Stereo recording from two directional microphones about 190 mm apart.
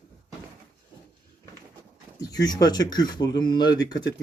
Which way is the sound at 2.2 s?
20° left (ahead or behind).